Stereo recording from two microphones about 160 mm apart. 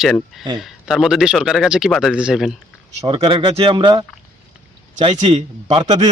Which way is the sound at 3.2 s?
30° right (ahead or behind).